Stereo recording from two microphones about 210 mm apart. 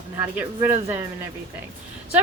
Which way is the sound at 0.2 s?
10° right (ahead or behind).